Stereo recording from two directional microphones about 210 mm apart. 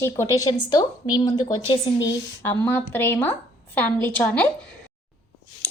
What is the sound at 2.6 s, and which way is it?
A woman's voice, 10° left (ahead or behind).